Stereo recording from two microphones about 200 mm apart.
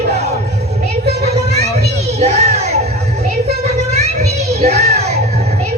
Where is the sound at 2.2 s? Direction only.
35° right (ahead or behind).